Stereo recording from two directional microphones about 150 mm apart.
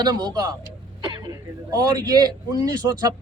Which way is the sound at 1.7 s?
25° right (ahead or behind).